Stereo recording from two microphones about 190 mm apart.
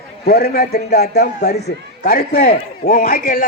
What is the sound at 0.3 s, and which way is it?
A man's voice, 55° left (ahead or behind).